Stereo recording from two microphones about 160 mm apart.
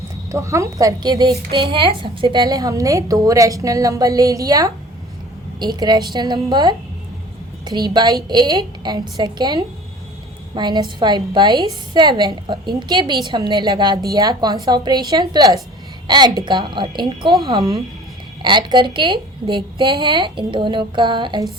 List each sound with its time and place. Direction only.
0.3 s a woman's voice: 20° right (ahead or behind)
18.4 s a woman's voice: 30° right (ahead or behind)